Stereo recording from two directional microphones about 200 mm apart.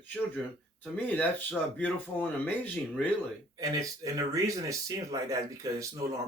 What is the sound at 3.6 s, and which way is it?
Speech, 15° right (ahead or behind).